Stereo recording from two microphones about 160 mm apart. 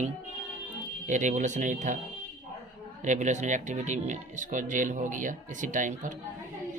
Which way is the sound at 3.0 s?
50° right (ahead or behind).